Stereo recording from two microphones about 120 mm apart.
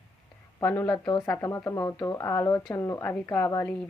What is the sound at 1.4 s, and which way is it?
A woman's voice, 25° left (ahead or behind).